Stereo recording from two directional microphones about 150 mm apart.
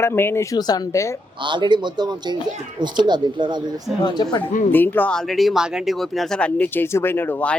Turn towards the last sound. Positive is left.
turn(degrees=10)  # may be behind; listen again after turning